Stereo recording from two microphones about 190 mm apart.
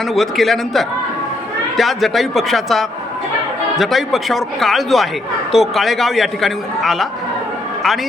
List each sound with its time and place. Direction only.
0.1 s a man's voice: centre (ahead or behind)